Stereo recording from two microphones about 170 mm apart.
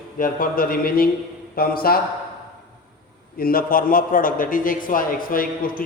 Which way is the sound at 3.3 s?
60° left (ahead or behind).